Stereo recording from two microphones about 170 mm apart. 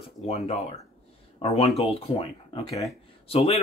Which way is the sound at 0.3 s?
40° left (ahead or behind).